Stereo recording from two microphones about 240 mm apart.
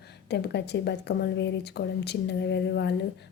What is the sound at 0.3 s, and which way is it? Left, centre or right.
A woman's voice, left.